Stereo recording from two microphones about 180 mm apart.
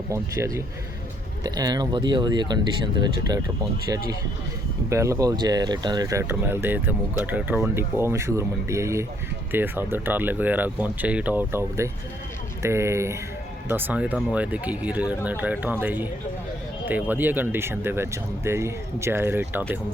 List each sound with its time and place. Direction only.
0.1 s speech: 15° right (ahead or behind)
4.9 s speech: 15° right (ahead or behind)